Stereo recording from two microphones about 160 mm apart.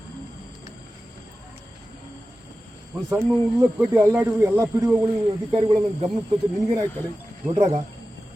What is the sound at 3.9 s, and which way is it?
Speech, 15° right (ahead or behind).